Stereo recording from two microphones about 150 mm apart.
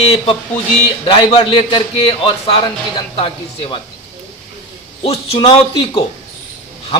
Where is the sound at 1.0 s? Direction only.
35° left (ahead or behind).